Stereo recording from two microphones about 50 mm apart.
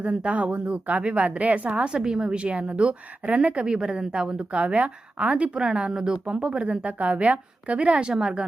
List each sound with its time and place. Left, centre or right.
0.0 s a woman's voice: right
8.1 s a woman's voice: centre